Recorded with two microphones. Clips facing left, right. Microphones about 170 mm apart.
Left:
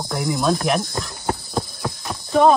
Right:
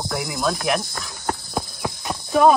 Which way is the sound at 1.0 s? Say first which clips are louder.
Left 6 dB; 25° left (ahead or behind).